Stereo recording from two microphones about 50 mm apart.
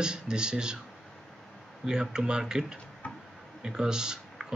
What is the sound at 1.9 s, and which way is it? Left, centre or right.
Speech, centre.